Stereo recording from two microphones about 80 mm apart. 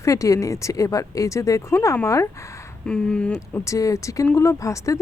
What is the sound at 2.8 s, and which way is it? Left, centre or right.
Speech, centre.